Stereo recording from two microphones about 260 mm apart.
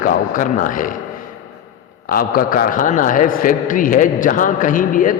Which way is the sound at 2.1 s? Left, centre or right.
Left.